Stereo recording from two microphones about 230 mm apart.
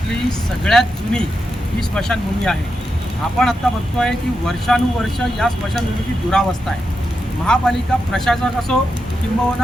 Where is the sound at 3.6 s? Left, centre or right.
Centre.